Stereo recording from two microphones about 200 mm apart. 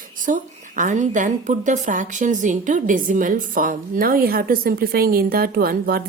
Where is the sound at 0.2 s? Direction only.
40° right (ahead or behind).